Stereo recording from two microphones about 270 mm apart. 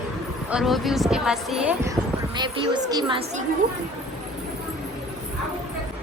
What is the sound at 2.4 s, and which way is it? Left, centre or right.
A woman's voice, centre.